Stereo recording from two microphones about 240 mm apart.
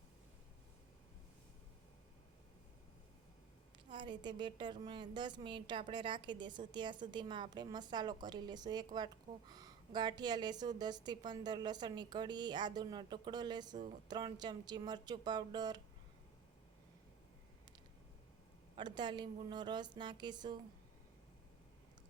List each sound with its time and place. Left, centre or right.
3.8 s a woman's voice: centre
18.8 s a woman's voice: centre